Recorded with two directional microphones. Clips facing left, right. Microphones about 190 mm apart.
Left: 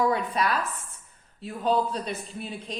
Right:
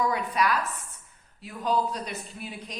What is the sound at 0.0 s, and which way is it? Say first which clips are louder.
A woman's voice: left 1 dB; 30° left (ahead or behind).